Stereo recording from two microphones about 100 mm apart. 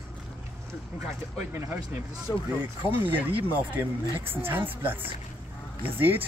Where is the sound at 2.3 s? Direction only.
40° left (ahead or behind).